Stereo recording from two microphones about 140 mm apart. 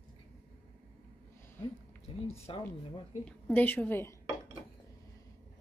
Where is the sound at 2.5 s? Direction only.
40° left (ahead or behind).